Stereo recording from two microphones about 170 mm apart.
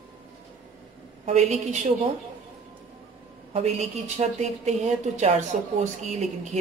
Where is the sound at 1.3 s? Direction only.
40° right (ahead or behind).